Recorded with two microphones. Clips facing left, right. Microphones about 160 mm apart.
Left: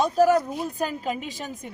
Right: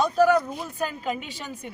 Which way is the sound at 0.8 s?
35° left (ahead or behind).